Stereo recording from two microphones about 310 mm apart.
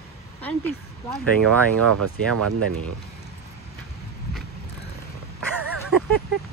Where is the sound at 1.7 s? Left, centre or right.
Right.